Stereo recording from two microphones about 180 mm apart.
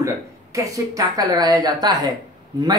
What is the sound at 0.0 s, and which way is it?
A woman's voice, 15° right (ahead or behind).